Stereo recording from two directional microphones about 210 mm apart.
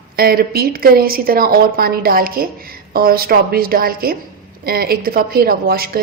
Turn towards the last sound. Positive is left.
turn(degrees=-45)  # may be behind; listen again after turning